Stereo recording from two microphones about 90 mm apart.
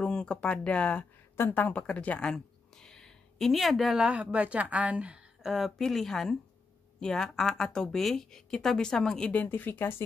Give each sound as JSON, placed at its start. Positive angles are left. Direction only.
{"t": 0.0, "sound": "a woman's voice", "side_deg": 10}